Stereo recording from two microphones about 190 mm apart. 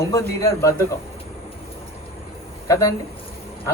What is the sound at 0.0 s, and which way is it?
Speech, 15° left (ahead or behind).